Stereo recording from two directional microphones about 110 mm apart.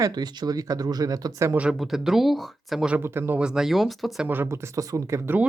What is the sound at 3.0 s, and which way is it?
Speech, 20° right (ahead or behind).